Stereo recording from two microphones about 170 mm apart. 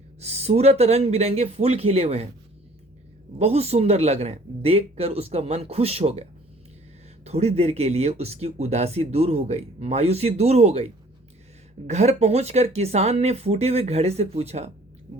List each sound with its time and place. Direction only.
0.2 s speech: 40° right (ahead or behind)
3.3 s speech: 35° right (ahead or behind)
7.3 s speech: 40° right (ahead or behind)
11.9 s speech: 40° right (ahead or behind)